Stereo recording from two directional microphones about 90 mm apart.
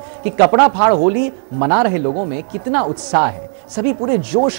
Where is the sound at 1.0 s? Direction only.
15° right (ahead or behind).